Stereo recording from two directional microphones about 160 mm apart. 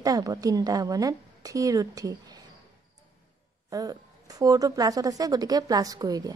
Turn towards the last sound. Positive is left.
turn(degrees=-25)  # may be behind; listen again after turning